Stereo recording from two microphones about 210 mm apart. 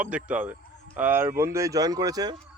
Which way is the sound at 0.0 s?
5° right (ahead or behind).